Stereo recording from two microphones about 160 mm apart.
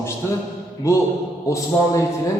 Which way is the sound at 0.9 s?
20° left (ahead or behind).